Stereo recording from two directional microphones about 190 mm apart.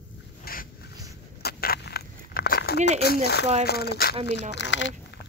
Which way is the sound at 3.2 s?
60° left (ahead or behind).